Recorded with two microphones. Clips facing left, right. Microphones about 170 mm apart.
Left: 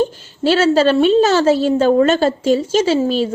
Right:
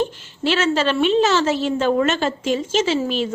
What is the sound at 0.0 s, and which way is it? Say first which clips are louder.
A woman's voice: left 5 dB; 35° left (ahead or behind).